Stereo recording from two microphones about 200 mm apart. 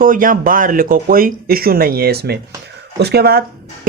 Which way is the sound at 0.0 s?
45° right (ahead or behind).